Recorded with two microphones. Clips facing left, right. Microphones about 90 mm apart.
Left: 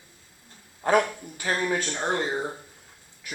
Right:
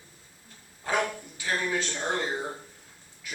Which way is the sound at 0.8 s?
50° left (ahead or behind).